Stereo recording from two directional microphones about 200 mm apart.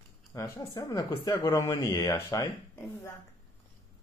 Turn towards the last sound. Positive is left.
turn(degrees=15)  # may be behind; listen again after turning